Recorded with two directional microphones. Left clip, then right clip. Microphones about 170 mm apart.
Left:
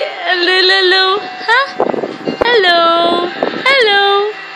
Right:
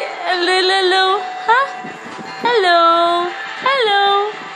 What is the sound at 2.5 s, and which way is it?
Speech, 15° left (ahead or behind).